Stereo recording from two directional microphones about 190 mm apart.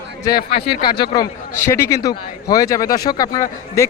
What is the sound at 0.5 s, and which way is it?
A man's voice, 30° left (ahead or behind).